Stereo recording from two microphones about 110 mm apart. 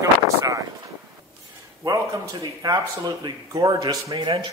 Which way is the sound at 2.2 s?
35° right (ahead or behind).